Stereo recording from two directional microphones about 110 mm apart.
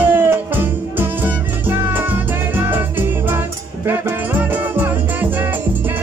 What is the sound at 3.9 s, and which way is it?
Music, 20° right (ahead or behind).